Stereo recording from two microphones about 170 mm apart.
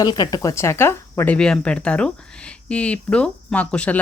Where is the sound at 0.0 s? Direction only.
25° left (ahead or behind).